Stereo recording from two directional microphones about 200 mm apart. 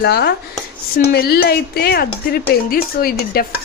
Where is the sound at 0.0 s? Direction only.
55° left (ahead or behind).